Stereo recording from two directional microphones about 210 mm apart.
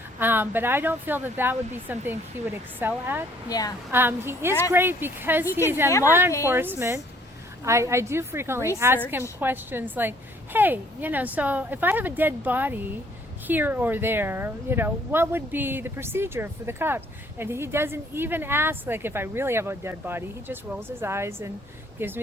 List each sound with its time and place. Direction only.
0.2 s speech: 10° right (ahead or behind)
3.5 s a woman's voice: 15° left (ahead or behind)
3.9 s speech: 10° right (ahead or behind)